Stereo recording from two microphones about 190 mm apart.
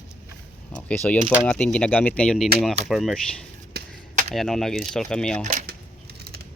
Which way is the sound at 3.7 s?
55° right (ahead or behind).